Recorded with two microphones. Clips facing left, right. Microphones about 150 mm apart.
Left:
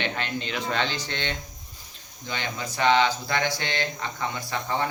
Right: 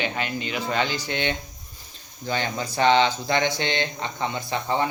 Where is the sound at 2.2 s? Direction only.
35° right (ahead or behind).